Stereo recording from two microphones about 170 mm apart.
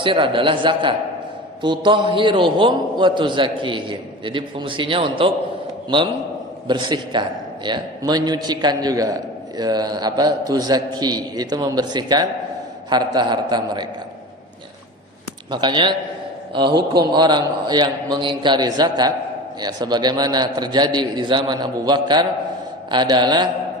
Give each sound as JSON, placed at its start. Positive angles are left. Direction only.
{"t": 0.0, "sound": "a man's voice", "side_deg": -30}
{"t": 6.7, "sound": "a man's voice", "side_deg": -25}
{"t": 15.4, "sound": "a man's voice", "side_deg": -25}